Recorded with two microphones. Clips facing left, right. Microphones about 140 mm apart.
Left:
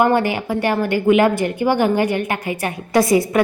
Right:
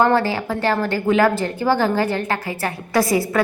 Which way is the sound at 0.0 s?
15° left (ahead or behind).